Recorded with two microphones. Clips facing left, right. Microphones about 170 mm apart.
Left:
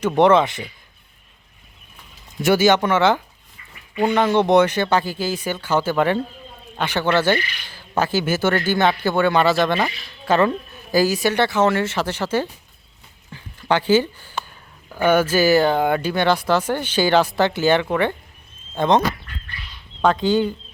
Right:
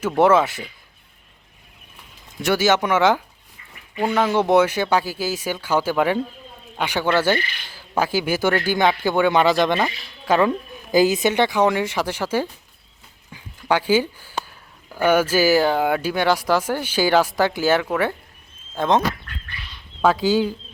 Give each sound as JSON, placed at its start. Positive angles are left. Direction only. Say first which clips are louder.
{"t": 0.2, "sound": "speech", "louder": "left 1 dB", "side_deg": -5}
{"t": 2.4, "sound": "speech", "louder": "left 3 dB", "side_deg": 0}
{"t": 13.3, "sound": "a sound", "louder": "left 1 dB", "side_deg": -10}
{"t": 14.8, "sound": "speech", "louder": "left 1 dB", "side_deg": -10}